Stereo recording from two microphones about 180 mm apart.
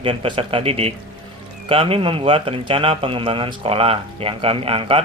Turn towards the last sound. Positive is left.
turn(degrees=-30)  # may be behind; listen again after turning